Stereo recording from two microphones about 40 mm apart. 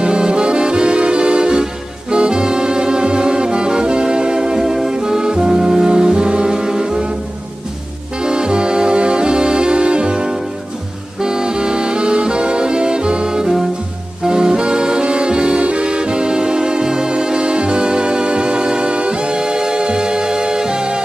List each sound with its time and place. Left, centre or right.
0.0 s music: right
8.2 s brass instrument: centre
11.1 s music: centre